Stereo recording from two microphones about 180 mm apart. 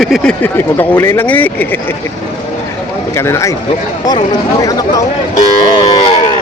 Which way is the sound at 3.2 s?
15° left (ahead or behind).